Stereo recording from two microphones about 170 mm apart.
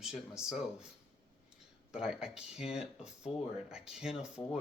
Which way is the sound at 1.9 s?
5° right (ahead or behind).